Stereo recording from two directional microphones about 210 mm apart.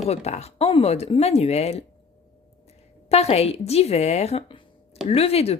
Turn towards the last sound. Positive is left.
turn(degrees=30)  # may be behind; listen again after turning